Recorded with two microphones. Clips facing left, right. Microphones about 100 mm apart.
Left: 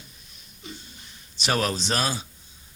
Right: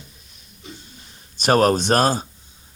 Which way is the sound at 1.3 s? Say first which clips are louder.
Right 9 dB; 45° right (ahead or behind).